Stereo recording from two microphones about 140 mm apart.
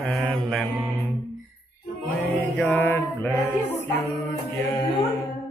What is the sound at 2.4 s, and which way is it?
Mantra, 15° left (ahead or behind).